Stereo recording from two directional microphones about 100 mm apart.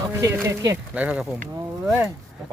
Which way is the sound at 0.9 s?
10° right (ahead or behind).